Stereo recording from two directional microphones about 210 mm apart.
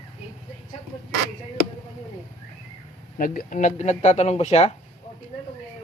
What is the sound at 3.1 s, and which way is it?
Speech, 40° left (ahead or behind).